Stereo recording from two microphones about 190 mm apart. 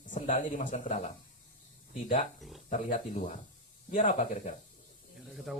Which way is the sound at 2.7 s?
40° left (ahead or behind).